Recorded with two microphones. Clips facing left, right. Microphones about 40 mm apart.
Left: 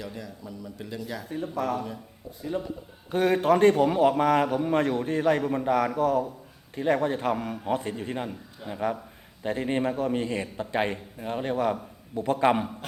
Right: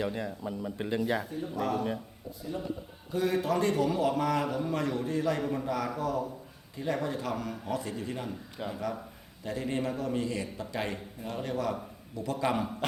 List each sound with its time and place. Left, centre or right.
0.0 s speech: right
1.3 s a man's voice: left
2.4 s a man's voice: left
3.1 s a man's voice: left
8.6 s speech: right
9.4 s a man's voice: left